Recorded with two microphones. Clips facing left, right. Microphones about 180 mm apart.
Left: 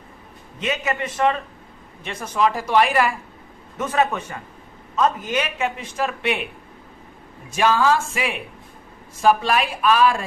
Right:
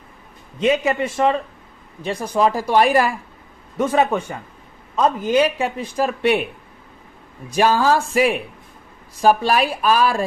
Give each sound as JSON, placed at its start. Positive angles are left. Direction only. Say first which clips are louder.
{"t": 0.6, "sound": "speech", "louder": "right 7 dB", "side_deg": -30}
{"t": 7.5, "sound": "speech", "louder": "right 2 dB", "side_deg": -35}